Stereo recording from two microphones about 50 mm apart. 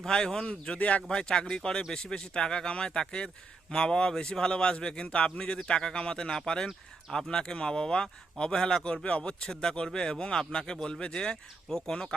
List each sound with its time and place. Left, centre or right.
0.0 s a man's voice: centre
1.0 s a man's voice: centre